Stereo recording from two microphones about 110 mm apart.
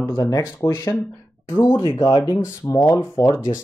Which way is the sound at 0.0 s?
30° left (ahead or behind).